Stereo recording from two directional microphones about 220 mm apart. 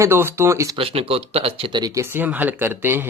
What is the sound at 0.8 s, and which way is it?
Speech, 25° right (ahead or behind).